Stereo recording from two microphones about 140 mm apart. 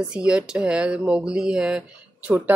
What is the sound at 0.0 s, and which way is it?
Speech, 5° right (ahead or behind).